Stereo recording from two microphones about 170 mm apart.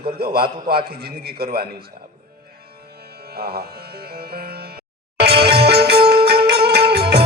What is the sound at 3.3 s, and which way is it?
Music, 65° right (ahead or behind).